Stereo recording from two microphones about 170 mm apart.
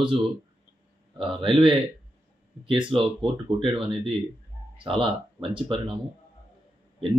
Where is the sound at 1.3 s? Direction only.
30° right (ahead or behind).